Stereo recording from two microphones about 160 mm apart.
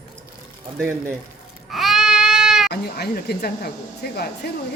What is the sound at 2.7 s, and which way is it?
Speech, 85° left.